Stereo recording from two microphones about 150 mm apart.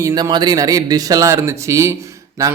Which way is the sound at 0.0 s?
30° right (ahead or behind).